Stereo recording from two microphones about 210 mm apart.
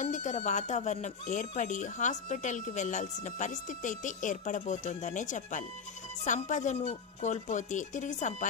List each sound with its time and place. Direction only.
0.0 s speech: 35° left (ahead or behind)